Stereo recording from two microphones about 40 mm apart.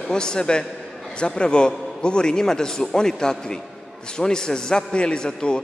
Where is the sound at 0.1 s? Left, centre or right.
Centre.